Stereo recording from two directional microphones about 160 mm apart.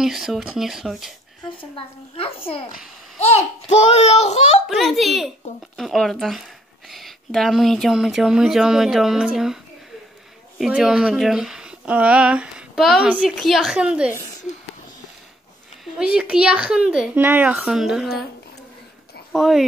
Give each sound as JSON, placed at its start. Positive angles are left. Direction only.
{"t": 0.0, "sound": "speech", "side_deg": 0}
{"t": 1.6, "sound": "a woman's voice", "side_deg": 35}
{"t": 4.6, "sound": "speech", "side_deg": 0}
{"t": 10.6, "sound": "speech", "side_deg": -5}
{"t": 15.8, "sound": "speech", "side_deg": -5}
{"t": 19.3, "sound": "speech", "side_deg": 0}